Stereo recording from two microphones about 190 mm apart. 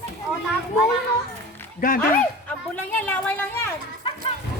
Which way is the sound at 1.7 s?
50° left (ahead or behind).